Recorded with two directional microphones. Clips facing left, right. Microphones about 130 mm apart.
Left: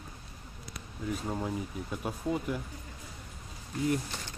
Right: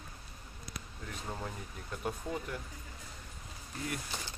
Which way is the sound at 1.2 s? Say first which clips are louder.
Left 4 dB; 15° left (ahead or behind).